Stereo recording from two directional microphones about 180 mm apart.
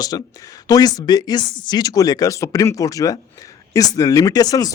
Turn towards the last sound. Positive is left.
turn(degrees=20)  # may be behind; listen again after turning